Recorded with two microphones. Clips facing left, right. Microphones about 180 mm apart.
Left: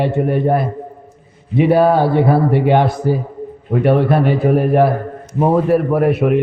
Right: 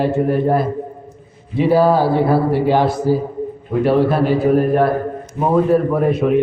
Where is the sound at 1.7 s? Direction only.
60° left (ahead or behind).